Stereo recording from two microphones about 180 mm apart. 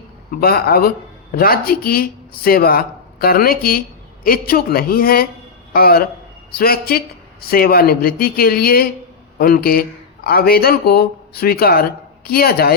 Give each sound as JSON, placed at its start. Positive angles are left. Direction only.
{"t": 0.3, "sound": "speech", "side_deg": 60}